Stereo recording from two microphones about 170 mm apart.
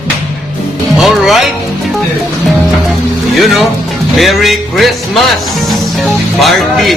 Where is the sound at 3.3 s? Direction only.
Centre (ahead or behind).